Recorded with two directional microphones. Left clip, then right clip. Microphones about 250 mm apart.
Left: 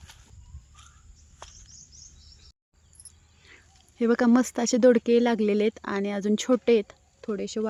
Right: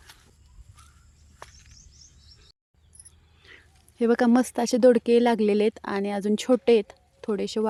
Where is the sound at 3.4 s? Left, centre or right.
Centre.